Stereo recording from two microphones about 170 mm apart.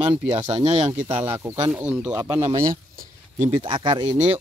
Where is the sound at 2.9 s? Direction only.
60° right (ahead or behind).